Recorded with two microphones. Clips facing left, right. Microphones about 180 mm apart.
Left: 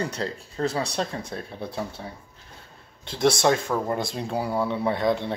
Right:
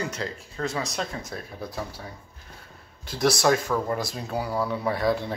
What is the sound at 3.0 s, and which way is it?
Speech, 25° left (ahead or behind).